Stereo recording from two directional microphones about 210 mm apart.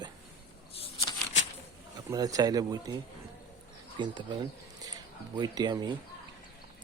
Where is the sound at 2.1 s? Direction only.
15° right (ahead or behind).